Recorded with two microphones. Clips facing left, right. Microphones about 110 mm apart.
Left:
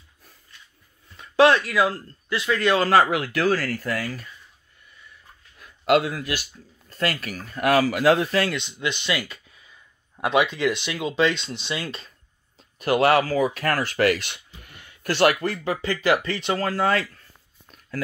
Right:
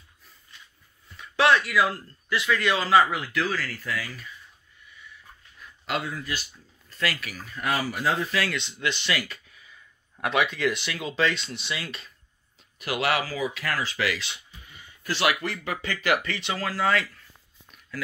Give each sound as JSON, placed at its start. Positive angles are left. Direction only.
{"t": 1.1, "sound": "speech", "side_deg": 35}
{"t": 2.8, "sound": "speech", "side_deg": 60}
{"t": 5.6, "sound": "speech", "side_deg": 65}
{"t": 6.9, "sound": "speech", "side_deg": 45}
{"t": 7.6, "sound": "speech", "side_deg": 90}
{"t": 8.5, "sound": "speech", "side_deg": 20}
{"t": 15.2, "sound": "speech", "side_deg": 40}
{"t": 15.6, "sound": "speech", "side_deg": 30}
{"t": 17.6, "sound": "a sound", "side_deg": 40}